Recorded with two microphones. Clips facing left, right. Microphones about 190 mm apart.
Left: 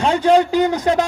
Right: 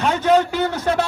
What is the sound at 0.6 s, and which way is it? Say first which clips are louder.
Speech: left 4 dB; 15° left (ahead or behind).